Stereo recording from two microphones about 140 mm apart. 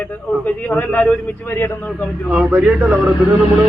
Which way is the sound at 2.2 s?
10° right (ahead or behind).